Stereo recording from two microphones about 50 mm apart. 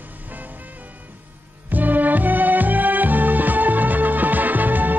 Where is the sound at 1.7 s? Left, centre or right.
Right.